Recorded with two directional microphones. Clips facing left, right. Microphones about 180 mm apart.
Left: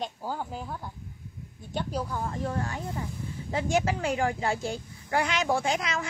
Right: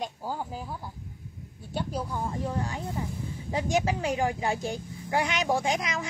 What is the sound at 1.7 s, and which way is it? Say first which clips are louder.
Speech: even; 10° right (ahead or behind).